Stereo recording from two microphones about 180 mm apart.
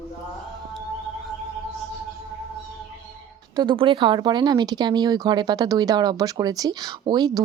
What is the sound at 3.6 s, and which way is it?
A woman's voice, 25° right (ahead or behind).